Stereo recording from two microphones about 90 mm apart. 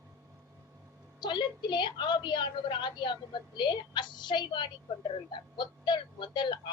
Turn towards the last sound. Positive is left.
turn(degrees=60)  # may be behind; listen again after turning